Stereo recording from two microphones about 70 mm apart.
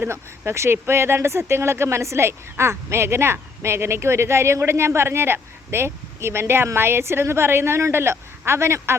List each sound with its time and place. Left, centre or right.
0.0 s speech: right